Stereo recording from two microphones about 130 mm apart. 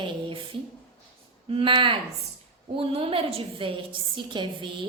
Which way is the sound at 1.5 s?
45° right (ahead or behind).